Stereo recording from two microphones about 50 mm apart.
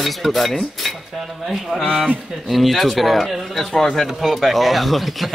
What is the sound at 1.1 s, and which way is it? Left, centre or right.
Speech, centre.